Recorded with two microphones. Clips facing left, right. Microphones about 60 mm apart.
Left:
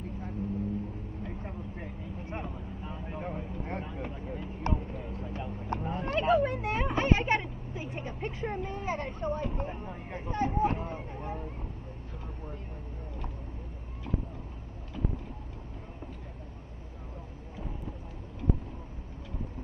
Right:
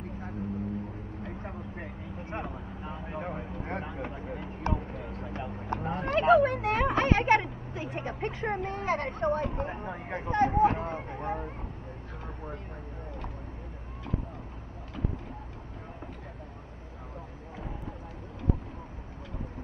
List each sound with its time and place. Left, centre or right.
1.2 s vehicle: right
4.3 s a sound: right
8.5 s speech: right